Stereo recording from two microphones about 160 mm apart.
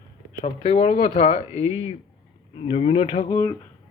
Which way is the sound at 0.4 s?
45° left (ahead or behind).